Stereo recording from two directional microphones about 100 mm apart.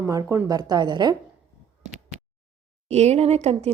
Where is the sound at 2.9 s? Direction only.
90° right.